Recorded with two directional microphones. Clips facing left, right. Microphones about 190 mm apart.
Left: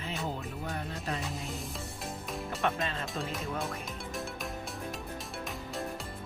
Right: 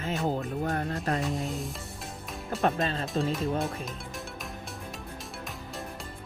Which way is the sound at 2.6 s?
35° right (ahead or behind).